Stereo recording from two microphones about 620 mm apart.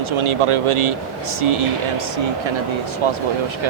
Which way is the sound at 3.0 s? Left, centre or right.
Right.